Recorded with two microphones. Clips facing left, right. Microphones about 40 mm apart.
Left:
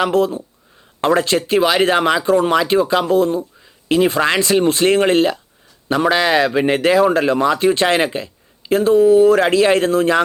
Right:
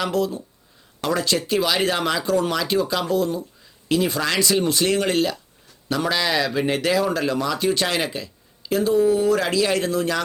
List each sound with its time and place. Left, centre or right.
0.0 s speech: left